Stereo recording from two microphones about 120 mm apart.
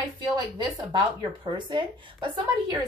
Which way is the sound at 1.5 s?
40° right (ahead or behind).